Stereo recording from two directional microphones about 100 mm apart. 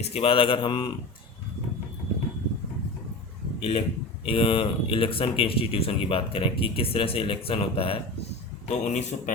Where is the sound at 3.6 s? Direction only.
80° left.